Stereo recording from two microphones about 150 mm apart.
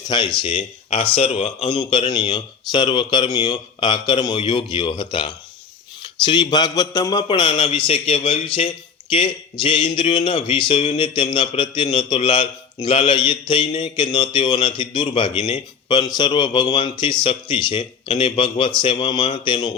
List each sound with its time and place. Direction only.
0.1 s speech: 30° left (ahead or behind)